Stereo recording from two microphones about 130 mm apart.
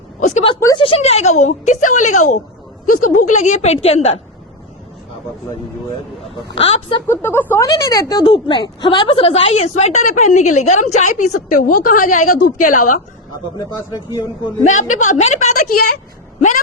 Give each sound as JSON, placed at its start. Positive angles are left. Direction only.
{"t": 0.2, "sound": "a sound", "side_deg": 65}
{"t": 0.8, "sound": "a woman's voice", "side_deg": 45}
{"t": 2.8, "sound": "a woman's voice", "side_deg": 90}
{"t": 6.5, "sound": "speech", "side_deg": 45}
{"t": 7.1, "sound": "speech", "side_deg": 15}
{"t": 8.1, "sound": "a woman's voice", "side_deg": 35}
{"t": 13.3, "sound": "speech", "side_deg": 30}
{"t": 14.6, "sound": "a woman's voice", "side_deg": 70}